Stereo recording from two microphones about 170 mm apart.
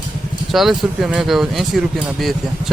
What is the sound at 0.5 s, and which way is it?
Speech, centre (ahead or behind).